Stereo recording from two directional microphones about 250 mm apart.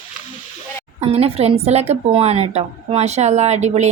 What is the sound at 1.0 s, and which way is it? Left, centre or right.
A woman's voice, right.